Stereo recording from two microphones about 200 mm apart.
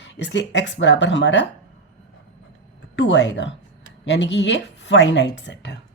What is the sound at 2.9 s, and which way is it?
A woman's voice, 65° left (ahead or behind).